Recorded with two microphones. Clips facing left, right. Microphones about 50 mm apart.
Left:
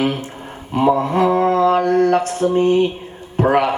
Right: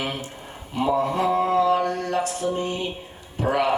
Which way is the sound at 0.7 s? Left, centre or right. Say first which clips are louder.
Left 7 dB; left.